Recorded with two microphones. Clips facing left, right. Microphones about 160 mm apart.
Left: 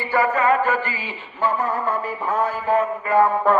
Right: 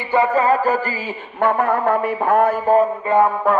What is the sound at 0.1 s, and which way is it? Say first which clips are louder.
Music: right 3 dB; 30° right (ahead or behind).